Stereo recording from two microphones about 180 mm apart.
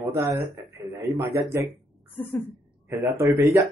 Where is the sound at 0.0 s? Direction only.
15° right (ahead or behind).